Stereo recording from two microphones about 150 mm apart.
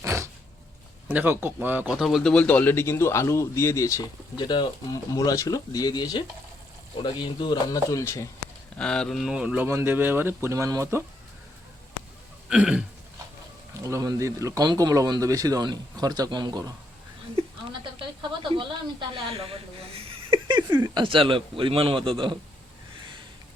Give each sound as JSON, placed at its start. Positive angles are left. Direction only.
{"t": 0.0, "sound": "a sound", "side_deg": -20}
{"t": 1.0, "sound": "speech", "side_deg": -15}
{"t": 8.8, "sound": "speech", "side_deg": 5}
{"t": 12.5, "sound": "speech", "side_deg": -5}
{"t": 13.8, "sound": "speech", "side_deg": -20}
{"t": 18.2, "sound": "speech", "side_deg": -35}